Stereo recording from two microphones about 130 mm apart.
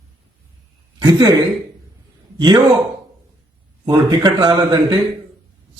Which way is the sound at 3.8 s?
30° right (ahead or behind).